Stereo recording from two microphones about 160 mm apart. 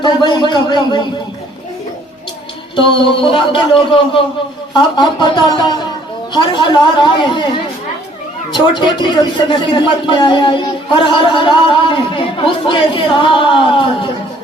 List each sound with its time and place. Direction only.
0.0 s a sound: 30° left (ahead or behind)
2.7 s a woman's voice: 35° left (ahead or behind)
8.5 s speech: 30° left (ahead or behind)